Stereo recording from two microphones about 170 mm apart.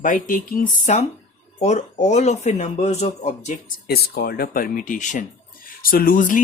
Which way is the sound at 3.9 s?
65° left (ahead or behind).